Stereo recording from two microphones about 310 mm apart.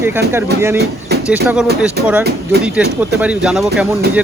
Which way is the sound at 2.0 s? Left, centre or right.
Right.